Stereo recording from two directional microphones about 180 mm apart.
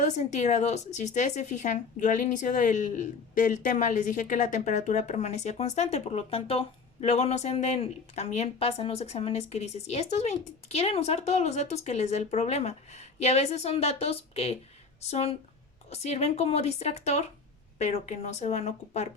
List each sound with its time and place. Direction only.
0.0 s speech: 40° left (ahead or behind)